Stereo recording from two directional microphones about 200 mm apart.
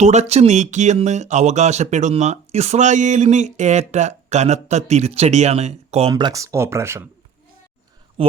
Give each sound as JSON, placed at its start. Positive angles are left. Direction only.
{"t": 0.0, "sound": "speech", "side_deg": -35}
{"t": 6.1, "sound": "speech", "side_deg": -20}
{"t": 8.2, "sound": "a sound", "side_deg": -30}